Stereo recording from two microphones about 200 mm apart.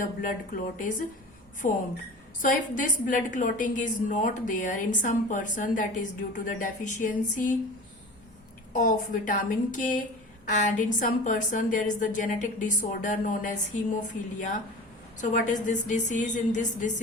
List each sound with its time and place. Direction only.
0.0 s a woman's voice: 40° left (ahead or behind)
8.7 s a woman's voice: 40° left (ahead or behind)